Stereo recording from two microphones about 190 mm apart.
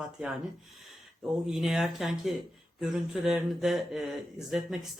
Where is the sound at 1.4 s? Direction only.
Centre (ahead or behind).